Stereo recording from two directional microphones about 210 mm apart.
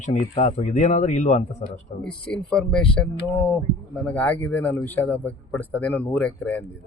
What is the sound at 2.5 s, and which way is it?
Speech, 5° left (ahead or behind).